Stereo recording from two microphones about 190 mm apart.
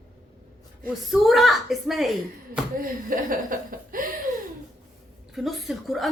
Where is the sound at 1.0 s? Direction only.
Centre (ahead or behind).